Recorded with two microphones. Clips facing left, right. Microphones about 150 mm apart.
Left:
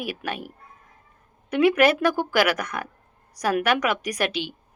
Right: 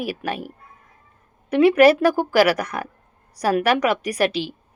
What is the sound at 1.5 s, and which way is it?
Speech, 30° right (ahead or behind).